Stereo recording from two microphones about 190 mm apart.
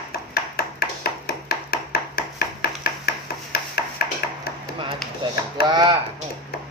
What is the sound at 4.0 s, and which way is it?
Ping, 55° left (ahead or behind).